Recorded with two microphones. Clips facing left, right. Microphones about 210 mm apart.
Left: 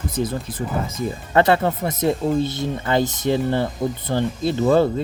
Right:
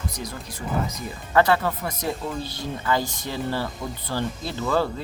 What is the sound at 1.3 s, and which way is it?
Speech, 25° left (ahead or behind).